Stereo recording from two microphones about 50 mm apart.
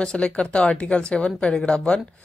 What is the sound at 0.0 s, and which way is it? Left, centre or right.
Speech, centre.